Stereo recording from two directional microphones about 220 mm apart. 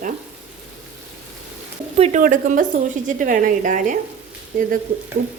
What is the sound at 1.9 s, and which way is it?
Speech, 30° right (ahead or behind).